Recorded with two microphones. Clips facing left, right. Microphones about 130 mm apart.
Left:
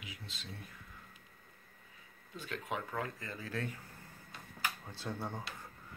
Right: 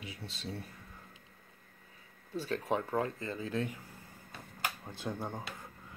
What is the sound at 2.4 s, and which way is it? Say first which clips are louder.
Speech: right 7 dB; 35° right (ahead or behind).